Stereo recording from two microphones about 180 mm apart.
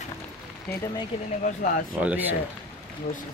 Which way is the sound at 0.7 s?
10° left (ahead or behind).